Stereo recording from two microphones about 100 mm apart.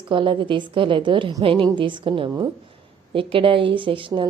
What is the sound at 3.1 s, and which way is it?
A woman's voice, 60° right (ahead or behind).